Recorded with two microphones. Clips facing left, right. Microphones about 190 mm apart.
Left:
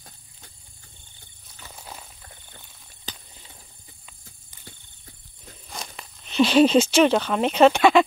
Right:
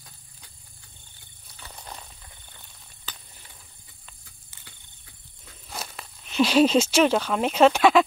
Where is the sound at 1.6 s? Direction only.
5° left (ahead or behind).